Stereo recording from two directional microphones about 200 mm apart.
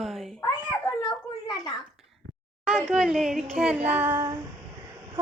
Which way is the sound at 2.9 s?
Centre (ahead or behind).